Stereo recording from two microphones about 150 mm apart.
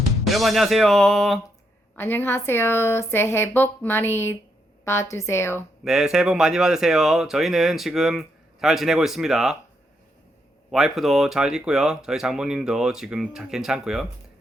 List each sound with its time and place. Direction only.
0.3 s speech: centre (ahead or behind)
2.0 s speech: 15° left (ahead or behind)
5.8 s speech: 5° right (ahead or behind)
10.7 s speech: centre (ahead or behind)